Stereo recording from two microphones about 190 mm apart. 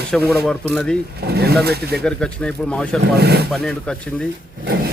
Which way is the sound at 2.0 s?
5° left (ahead or behind).